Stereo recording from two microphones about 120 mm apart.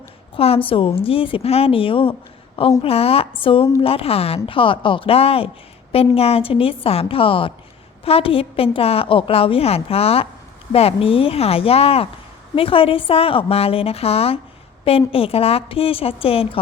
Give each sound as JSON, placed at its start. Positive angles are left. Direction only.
{"t": 0.3, "sound": "a woman's voice", "side_deg": 55}